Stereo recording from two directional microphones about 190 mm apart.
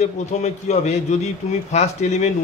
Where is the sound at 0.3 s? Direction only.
35° left (ahead or behind).